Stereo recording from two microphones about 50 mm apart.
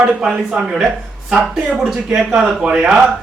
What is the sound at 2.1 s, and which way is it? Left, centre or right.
Speech, centre.